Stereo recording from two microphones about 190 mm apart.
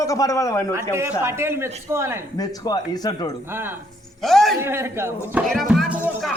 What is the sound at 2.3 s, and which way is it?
Speech, 20° left (ahead or behind).